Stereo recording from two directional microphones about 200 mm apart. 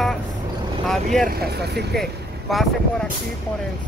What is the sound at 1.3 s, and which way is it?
Speech, 50° right (ahead or behind).